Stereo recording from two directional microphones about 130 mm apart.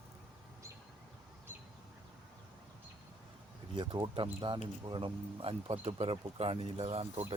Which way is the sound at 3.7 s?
35° right (ahead or behind).